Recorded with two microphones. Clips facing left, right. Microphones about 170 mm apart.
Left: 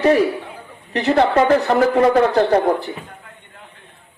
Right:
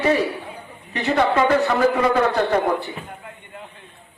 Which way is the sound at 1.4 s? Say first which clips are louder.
Left 3 dB; 45° left (ahead or behind).